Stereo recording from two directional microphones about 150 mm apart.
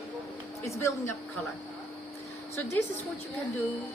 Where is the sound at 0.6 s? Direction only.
20° left (ahead or behind).